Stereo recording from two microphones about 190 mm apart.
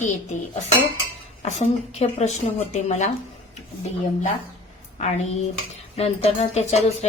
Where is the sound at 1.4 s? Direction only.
35° left (ahead or behind).